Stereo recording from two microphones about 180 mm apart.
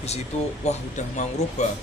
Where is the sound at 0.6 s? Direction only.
40° left (ahead or behind).